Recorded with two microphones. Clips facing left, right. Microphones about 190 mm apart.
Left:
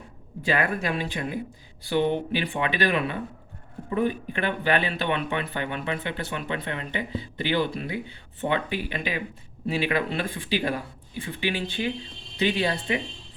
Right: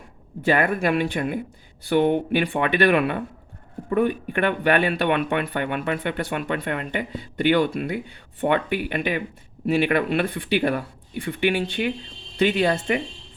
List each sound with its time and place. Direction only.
0.4 s speech: 50° right (ahead or behind)